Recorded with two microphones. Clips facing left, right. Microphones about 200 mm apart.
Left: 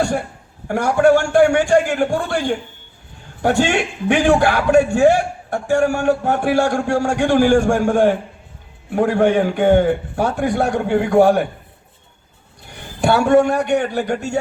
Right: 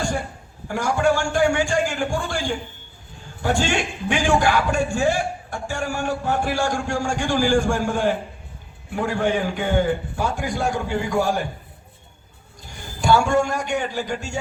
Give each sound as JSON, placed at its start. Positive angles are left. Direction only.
{"t": 0.7, "sound": "a man's voice", "side_deg": 65}
{"t": 12.7, "sound": "a man's voice", "side_deg": 65}